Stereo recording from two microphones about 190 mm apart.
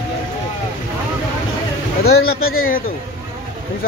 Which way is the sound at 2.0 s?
55° left (ahead or behind).